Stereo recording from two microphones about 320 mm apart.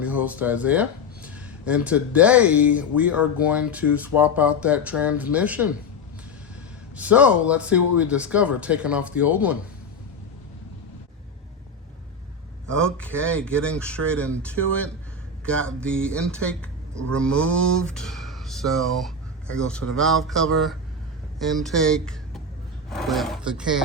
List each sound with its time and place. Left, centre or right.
0.0 s speech: centre
6.9 s speech: centre
12.6 s speech: centre